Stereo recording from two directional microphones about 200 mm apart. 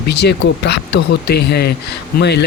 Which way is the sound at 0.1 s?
55° left (ahead or behind).